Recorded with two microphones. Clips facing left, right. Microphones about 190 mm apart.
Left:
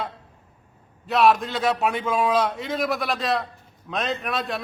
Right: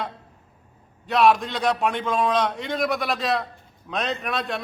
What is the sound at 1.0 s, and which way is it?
A man's voice, centre (ahead or behind).